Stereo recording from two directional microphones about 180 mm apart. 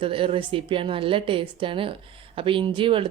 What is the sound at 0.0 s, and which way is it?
A woman's voice, 30° right (ahead or behind).